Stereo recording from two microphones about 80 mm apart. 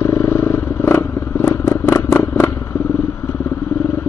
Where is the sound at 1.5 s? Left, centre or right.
Left.